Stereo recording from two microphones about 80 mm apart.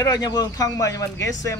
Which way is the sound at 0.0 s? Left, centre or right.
Left.